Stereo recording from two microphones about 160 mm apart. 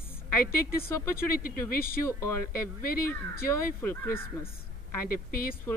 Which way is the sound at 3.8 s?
15° left (ahead or behind).